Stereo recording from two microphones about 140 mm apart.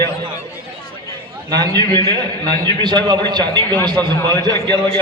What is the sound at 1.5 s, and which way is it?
A man's voice, 30° right (ahead or behind).